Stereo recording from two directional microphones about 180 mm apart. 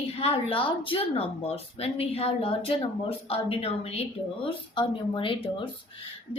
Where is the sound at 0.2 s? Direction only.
30° left (ahead or behind).